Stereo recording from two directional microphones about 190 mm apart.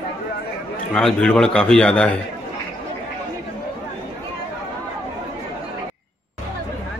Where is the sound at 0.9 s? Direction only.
5° left (ahead or behind).